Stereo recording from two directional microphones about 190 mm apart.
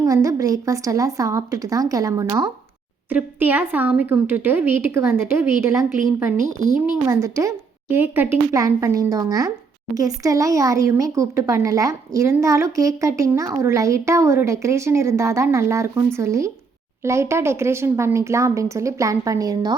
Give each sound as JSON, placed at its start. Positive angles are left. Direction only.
{"t": 0.0, "sound": "speech", "side_deg": -15}